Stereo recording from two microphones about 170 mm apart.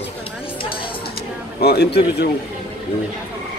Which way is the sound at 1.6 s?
75° left (ahead or behind).